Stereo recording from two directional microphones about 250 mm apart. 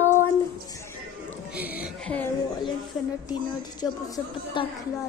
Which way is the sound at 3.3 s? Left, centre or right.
Centre.